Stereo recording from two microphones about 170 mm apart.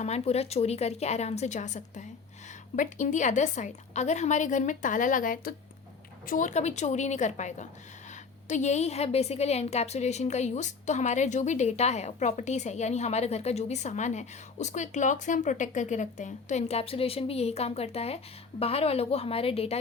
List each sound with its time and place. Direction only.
0.0 s a woman's voice: 40° left (ahead or behind)